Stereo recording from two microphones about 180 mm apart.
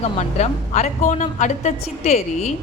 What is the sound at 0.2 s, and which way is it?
A woman's voice, 40° left (ahead or behind).